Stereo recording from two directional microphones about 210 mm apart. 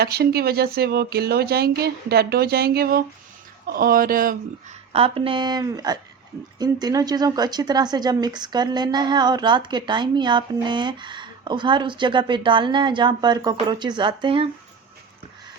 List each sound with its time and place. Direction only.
0.0 s speech: 50° right (ahead or behind)
4.9 s speech: 25° right (ahead or behind)